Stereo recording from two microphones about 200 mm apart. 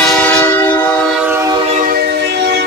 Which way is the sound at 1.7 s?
45° right (ahead or behind).